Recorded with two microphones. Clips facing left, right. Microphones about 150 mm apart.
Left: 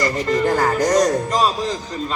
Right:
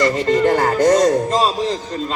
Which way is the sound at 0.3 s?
25° right (ahead or behind).